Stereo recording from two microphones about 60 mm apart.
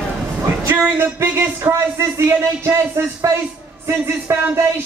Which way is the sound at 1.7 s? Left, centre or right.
Right.